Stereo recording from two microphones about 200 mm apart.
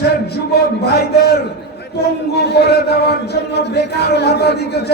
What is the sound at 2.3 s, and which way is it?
A man's voice, 55° left (ahead or behind).